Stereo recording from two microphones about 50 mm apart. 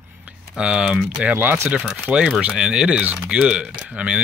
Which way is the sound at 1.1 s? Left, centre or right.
Right.